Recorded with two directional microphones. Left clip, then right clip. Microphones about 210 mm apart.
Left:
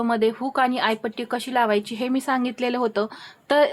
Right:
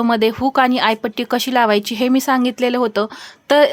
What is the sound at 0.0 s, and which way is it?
A woman's voice, 40° right (ahead or behind).